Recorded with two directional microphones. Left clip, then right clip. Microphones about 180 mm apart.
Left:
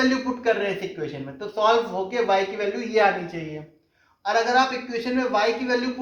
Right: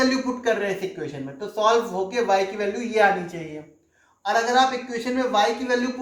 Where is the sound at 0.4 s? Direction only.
30° left (ahead or behind).